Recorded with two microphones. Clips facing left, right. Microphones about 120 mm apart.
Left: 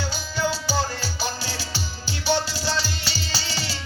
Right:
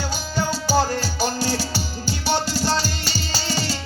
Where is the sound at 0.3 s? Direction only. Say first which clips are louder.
Right 4 dB; 45° right (ahead or behind).